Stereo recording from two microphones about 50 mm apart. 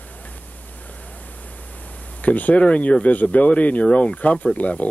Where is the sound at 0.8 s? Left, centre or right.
Left.